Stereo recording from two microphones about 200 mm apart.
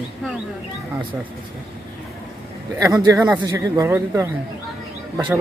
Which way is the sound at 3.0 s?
15° right (ahead or behind).